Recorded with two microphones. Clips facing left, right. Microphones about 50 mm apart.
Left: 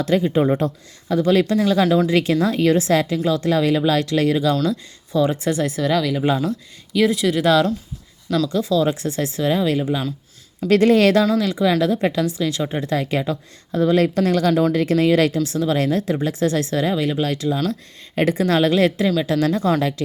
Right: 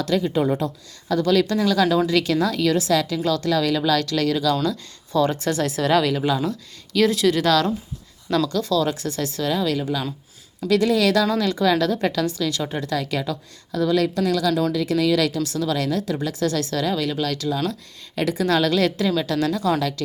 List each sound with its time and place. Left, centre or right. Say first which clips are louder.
0.0 s a woman's voice: left 3 dB; left
10.7 s speech: left 4 dB; left
11.3 s a woman's voice: left 1 dB; centre